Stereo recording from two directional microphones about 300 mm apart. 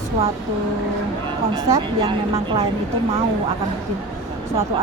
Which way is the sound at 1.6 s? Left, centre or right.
Centre.